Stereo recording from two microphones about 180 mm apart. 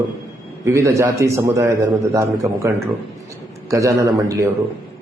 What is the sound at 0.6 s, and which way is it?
A man's voice, 15° right (ahead or behind).